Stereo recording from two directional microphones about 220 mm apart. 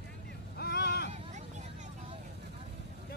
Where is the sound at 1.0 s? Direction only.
30° right (ahead or behind).